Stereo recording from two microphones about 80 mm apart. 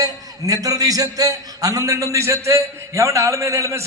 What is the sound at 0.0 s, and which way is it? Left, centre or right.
A man's voice, right.